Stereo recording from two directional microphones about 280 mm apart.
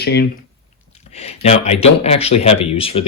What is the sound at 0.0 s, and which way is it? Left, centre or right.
Speech, left.